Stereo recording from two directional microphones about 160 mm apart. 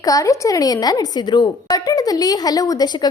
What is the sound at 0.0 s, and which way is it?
A woman's voice, 20° left (ahead or behind).